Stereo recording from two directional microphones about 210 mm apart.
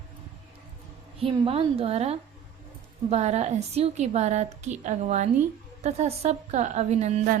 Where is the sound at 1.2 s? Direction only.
25° right (ahead or behind).